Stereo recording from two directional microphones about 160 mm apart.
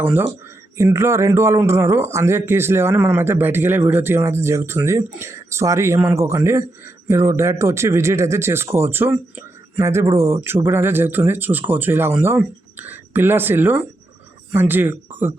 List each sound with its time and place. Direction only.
0.0 s speech: 15° right (ahead or behind)